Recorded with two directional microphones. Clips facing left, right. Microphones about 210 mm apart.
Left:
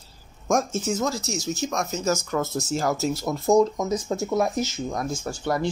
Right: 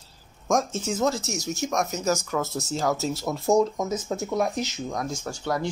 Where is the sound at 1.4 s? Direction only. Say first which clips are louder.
Right 2 dB; 20° right (ahead or behind).